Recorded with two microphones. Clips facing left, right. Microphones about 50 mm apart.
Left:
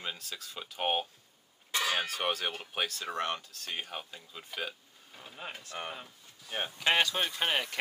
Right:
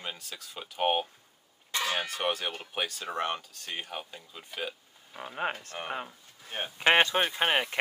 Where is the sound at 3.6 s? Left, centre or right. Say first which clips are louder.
Right 1 dB; centre.